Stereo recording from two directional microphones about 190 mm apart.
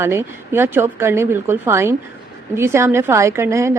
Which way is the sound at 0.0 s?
15° right (ahead or behind).